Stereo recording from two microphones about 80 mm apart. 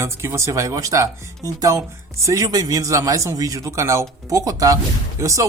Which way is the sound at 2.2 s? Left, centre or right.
Right.